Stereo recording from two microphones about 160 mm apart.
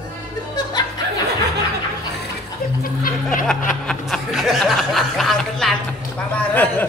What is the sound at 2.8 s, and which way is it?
Speech, 65° left (ahead or behind).